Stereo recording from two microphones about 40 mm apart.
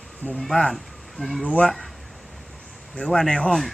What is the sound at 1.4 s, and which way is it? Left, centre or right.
Speech, left.